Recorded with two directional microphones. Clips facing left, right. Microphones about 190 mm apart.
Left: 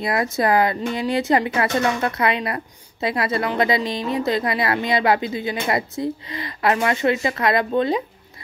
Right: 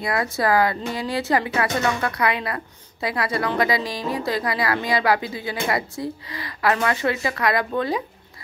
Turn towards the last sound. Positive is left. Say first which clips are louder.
# left 3 dB
turn(degrees=25)  # may be behind; listen again after turning